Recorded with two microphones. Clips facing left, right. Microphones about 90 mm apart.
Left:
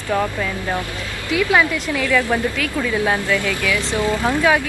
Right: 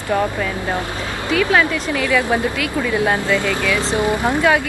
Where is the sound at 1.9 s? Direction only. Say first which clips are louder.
Right 1 dB; 15° right (ahead or behind).